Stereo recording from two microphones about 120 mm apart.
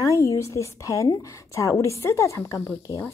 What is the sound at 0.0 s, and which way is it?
A woman's voice, 25° left (ahead or behind).